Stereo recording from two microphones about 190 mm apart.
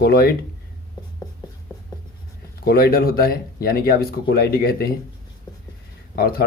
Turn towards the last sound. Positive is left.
turn(degrees=50)  # may be behind; listen again after turning